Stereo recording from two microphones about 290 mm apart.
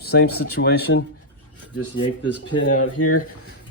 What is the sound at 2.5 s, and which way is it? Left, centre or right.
Speech, left.